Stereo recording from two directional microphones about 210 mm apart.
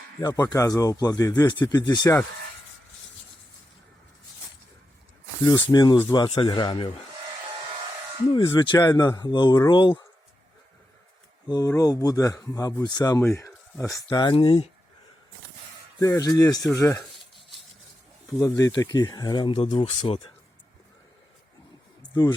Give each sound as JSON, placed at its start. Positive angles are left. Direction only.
{"t": 0.2, "sound": "speech", "side_deg": 20}
{"t": 5.4, "sound": "speech", "side_deg": 20}
{"t": 8.3, "sound": "speech", "side_deg": 20}
{"t": 11.4, "sound": "speech", "side_deg": 15}
{"t": 16.0, "sound": "speech", "side_deg": 15}
{"t": 18.4, "sound": "speech", "side_deg": 15}
{"t": 22.1, "sound": "speech", "side_deg": 20}